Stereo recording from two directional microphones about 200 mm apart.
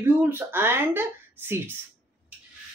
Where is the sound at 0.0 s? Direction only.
10° right (ahead or behind).